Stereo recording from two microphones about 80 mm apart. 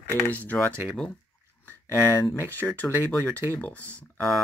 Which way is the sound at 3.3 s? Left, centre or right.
Right.